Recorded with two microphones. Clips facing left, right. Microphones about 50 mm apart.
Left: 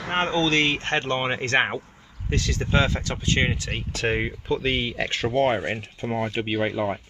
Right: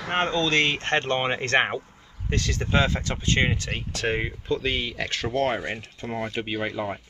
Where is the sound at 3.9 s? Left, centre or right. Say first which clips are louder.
Left 2 dB; left; by 7.0 s centre.